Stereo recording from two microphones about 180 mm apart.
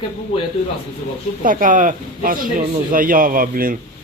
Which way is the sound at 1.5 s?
45° right (ahead or behind).